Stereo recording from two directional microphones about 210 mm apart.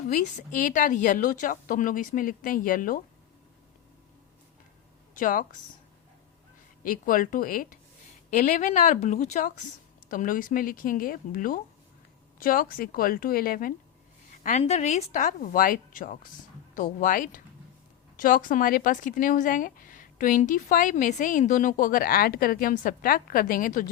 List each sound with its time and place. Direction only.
0.1 s speech: 40° left (ahead or behind)
5.1 s speech: 40° left (ahead or behind)
6.8 s a woman's voice: 40° left (ahead or behind)
14.4 s speech: 30° left (ahead or behind)